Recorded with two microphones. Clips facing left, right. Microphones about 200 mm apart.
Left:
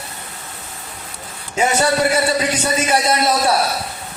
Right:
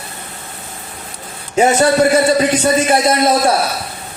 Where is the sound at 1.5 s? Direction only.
45° right (ahead or behind).